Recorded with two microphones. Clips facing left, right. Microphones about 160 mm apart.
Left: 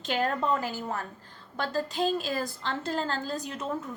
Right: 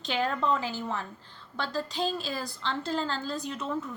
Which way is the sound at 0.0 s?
45° left (ahead or behind).